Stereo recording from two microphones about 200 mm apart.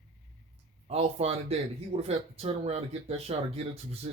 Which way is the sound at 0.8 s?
30° right (ahead or behind).